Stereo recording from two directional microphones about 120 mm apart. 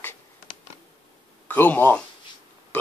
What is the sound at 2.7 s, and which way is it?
Burping, 15° left (ahead or behind).